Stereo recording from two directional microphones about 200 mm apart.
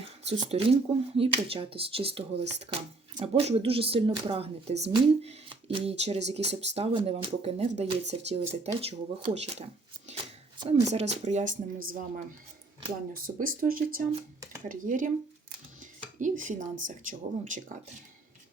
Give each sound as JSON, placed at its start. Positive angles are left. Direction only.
{"t": 0.3, "sound": "speech", "side_deg": -30}
{"t": 11.5, "sound": "speech", "side_deg": -85}
{"t": 13.1, "sound": "speech", "side_deg": -45}
{"t": 15.8, "sound": "dishes", "side_deg": -40}
{"t": 16.8, "sound": "speech", "side_deg": -40}